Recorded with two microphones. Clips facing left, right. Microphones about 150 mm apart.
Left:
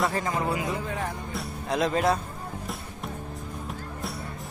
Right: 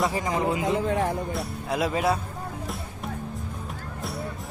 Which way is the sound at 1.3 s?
5° right (ahead or behind).